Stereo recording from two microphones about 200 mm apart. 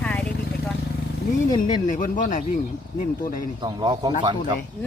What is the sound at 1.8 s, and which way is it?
Speech, 40° left (ahead or behind).